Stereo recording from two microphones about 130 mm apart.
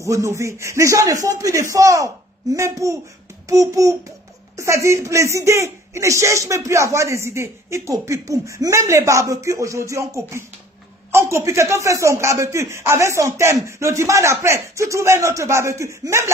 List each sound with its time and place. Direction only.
0.0 s speech: 20° right (ahead or behind)